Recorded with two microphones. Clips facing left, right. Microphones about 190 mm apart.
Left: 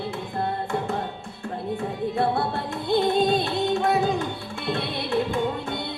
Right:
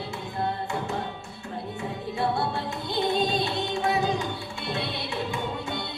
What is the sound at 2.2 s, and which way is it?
Music, 55° left (ahead or behind).